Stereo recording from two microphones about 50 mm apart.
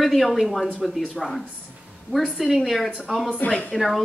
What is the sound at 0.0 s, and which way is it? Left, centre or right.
Speech, centre.